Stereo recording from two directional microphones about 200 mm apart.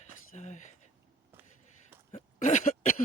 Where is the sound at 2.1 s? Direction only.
40° left (ahead or behind).